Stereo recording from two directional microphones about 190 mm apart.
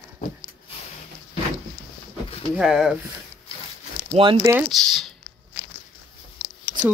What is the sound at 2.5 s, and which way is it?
Speech, 5° right (ahead or behind).